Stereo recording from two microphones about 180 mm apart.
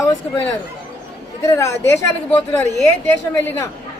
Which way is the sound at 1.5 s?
15° left (ahead or behind).